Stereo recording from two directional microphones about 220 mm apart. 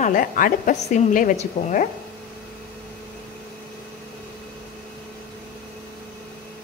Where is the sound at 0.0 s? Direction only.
35° left (ahead or behind).